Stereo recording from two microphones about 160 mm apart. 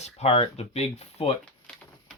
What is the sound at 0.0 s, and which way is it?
Speech, 40° left (ahead or behind).